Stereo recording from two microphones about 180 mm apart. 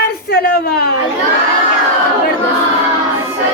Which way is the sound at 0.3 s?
60° left (ahead or behind).